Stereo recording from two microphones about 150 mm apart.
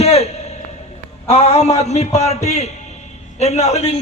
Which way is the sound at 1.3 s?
45° left (ahead or behind).